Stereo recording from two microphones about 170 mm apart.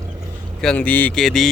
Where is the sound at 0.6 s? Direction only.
5° left (ahead or behind).